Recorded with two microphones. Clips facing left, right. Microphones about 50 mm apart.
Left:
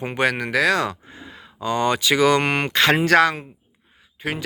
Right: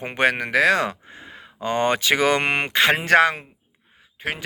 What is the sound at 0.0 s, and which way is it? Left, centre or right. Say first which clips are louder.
Speech: right 1 dB; right.